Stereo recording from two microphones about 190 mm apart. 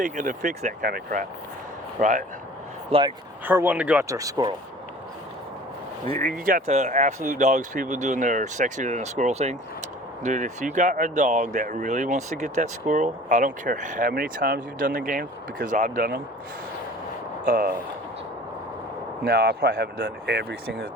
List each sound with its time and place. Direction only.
0.0 s speech: 40° right (ahead or behind)
2.9 s speech: 30° right (ahead or behind)
3.4 s speech: 10° right (ahead or behind)
6.2 s speech: 50° right (ahead or behind)
6.7 s speech: 40° right (ahead or behind)
17.4 s speech: 50° right (ahead or behind)
19.2 s speech: 55° right (ahead or behind)